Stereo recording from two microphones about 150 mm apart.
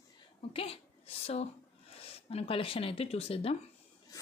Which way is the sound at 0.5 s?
40° left (ahead or behind).